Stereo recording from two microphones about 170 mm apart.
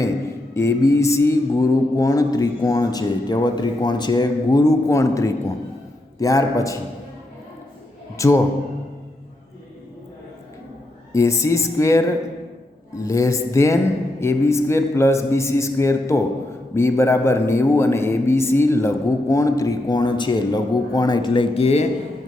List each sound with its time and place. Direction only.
0.5 s music: 15° left (ahead or behind)
8.1 s a man's voice: 20° left (ahead or behind)
11.1 s a man's voice: 15° left (ahead or behind); by 21.8 s 35° left (ahead or behind)